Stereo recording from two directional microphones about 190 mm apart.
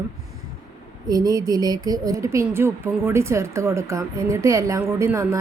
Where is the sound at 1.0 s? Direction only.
20° right (ahead or behind).